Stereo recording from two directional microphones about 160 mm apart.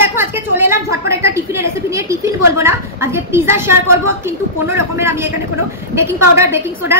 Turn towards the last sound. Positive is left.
turn(degrees=-15)  # may be behind; listen again after turning